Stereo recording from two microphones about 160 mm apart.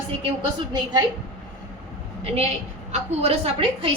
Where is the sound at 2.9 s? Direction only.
40° right (ahead or behind).